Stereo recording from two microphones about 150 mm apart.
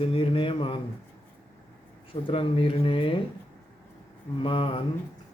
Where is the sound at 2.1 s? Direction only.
35° left (ahead or behind).